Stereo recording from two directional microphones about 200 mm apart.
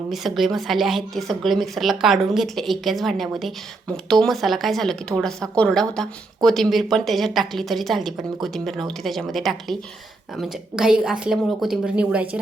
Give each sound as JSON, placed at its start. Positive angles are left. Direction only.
{"t": 0.1, "sound": "a woman's voice", "side_deg": 0}